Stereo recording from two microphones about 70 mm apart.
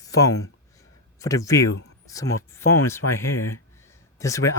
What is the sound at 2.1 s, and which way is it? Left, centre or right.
Speech, left.